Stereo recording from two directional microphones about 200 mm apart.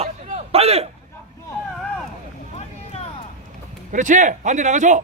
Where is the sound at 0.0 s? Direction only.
30° right (ahead or behind).